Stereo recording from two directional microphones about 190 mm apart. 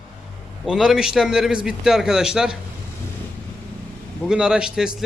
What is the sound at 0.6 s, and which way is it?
A man's voice, 5° right (ahead or behind).